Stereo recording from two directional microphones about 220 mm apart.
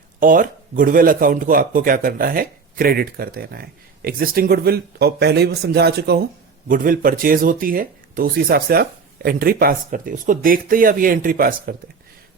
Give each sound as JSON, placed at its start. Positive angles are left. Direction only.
{"t": 0.2, "sound": "speech", "side_deg": -40}